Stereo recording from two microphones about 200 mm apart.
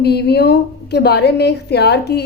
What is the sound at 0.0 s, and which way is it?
A woman's voice, 55° left (ahead or behind).